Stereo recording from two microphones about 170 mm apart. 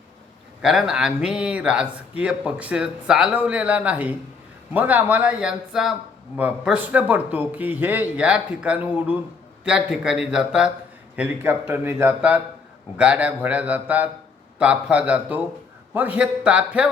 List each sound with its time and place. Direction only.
0.6 s a man's voice: centre (ahead or behind)